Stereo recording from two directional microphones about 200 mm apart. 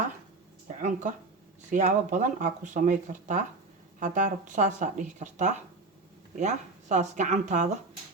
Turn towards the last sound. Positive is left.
turn(degrees=-35)  # may be behind; listen again after turning